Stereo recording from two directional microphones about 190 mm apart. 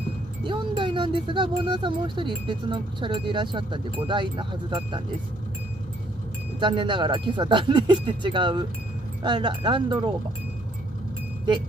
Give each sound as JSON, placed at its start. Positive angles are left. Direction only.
{"t": 0.5, "sound": "speech", "side_deg": -25}
{"t": 6.6, "sound": "speech", "side_deg": -25}